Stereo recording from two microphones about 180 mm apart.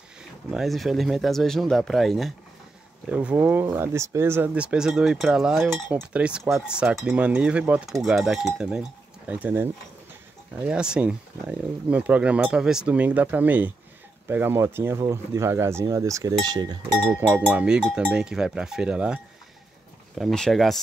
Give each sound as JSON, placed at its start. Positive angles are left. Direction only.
{"t": 0.5, "sound": "speech", "side_deg": 0}
{"t": 10.7, "sound": "speech", "side_deg": -5}
{"t": 17.3, "sound": "speech", "side_deg": -5}